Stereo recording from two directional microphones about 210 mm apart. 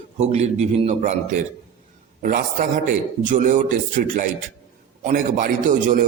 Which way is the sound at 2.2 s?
40° right (ahead or behind).